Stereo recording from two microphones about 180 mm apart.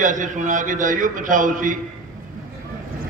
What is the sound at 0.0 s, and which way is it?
A man's voice, 45° right (ahead or behind).